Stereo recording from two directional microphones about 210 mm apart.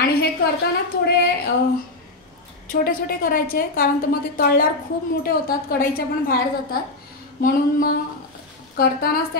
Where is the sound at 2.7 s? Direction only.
45° left (ahead or behind).